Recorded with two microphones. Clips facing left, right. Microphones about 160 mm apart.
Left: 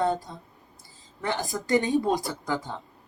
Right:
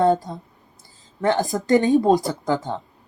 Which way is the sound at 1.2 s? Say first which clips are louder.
Right 9 dB; 45° right (ahead or behind).